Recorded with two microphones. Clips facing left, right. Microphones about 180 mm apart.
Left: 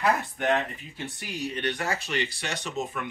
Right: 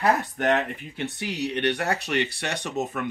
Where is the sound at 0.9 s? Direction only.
70° right (ahead or behind).